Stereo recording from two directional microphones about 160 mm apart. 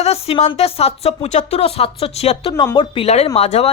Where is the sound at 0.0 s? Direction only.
40° left (ahead or behind).